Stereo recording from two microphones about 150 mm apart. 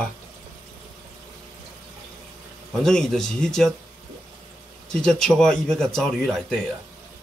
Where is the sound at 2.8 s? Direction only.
5° left (ahead or behind).